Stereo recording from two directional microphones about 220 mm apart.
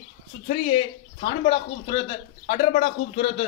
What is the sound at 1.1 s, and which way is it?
Speech, 25° left (ahead or behind).